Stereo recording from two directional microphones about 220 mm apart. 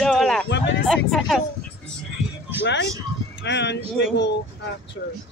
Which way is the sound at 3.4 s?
50° left (ahead or behind).